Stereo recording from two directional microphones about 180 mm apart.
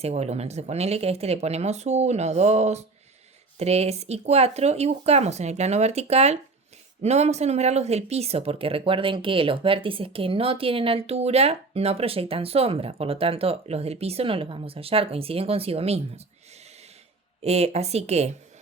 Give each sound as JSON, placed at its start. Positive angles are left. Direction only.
{"t": 0.0, "sound": "speech", "side_deg": -35}
{"t": 17.4, "sound": "speech", "side_deg": -35}